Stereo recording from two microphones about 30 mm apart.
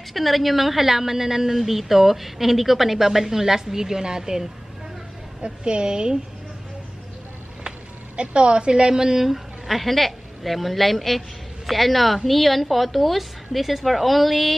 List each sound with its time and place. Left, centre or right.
0.1 s a woman's voice: centre; by 4.4 s right
5.4 s a woman's voice: right
8.2 s a woman's voice: right
9.2 s a woman's voice: centre